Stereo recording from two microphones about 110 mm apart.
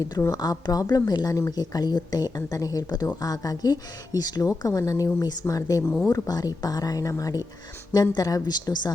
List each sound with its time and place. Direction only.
0.3 s speech: 35° left (ahead or behind)